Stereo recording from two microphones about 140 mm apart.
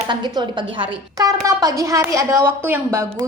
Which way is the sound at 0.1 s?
30° right (ahead or behind).